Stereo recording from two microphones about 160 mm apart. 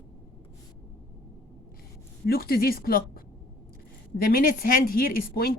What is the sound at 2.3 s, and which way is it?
A woman's voice, 70° left (ahead or behind).